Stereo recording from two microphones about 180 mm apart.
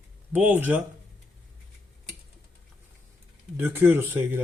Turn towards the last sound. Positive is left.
turn(degrees=-10)  # may be behind; listen again after turning